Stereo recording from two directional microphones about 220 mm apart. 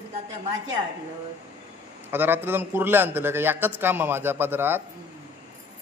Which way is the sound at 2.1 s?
10° right (ahead or behind).